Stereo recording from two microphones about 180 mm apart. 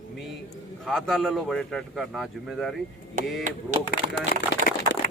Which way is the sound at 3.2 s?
45° right (ahead or behind).